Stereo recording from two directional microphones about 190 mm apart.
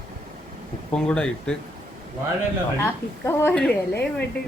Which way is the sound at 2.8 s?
10° left (ahead or behind).